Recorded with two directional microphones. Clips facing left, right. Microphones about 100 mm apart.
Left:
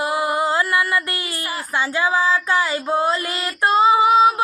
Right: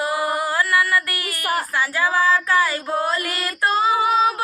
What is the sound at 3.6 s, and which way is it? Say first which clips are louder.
Female singing: left 4 dB; 25° left (ahead or behind).